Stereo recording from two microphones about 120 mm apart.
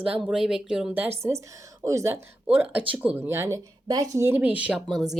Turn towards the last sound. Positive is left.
turn(degrees=-5)  # may be behind; listen again after turning